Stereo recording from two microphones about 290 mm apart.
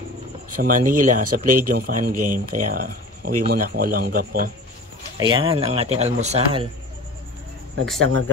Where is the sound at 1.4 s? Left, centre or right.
Right.